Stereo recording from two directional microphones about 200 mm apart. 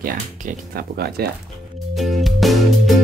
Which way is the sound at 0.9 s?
50° right (ahead or behind).